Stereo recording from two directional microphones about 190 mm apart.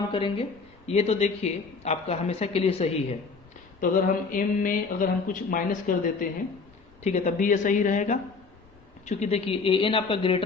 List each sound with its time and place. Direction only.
0.1 s a woman's voice: 25° left (ahead or behind)
3.8 s a woman's voice: 45° left (ahead or behind); by 10.4 s 25° left (ahead or behind)